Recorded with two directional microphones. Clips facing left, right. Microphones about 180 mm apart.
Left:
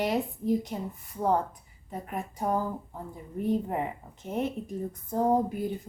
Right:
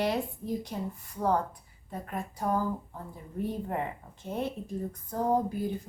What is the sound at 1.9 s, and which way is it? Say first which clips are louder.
Speech: left 1 dB; 15° left (ahead or behind).